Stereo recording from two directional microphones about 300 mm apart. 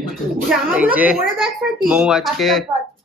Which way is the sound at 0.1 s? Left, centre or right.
Centre.